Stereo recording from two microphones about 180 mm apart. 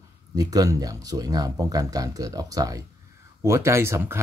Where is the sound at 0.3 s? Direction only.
20° right (ahead or behind).